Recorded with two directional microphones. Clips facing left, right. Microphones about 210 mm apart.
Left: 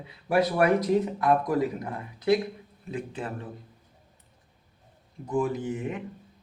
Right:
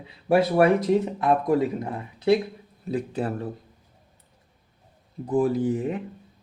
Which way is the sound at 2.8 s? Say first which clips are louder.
Right 7 dB; 35° right (ahead or behind).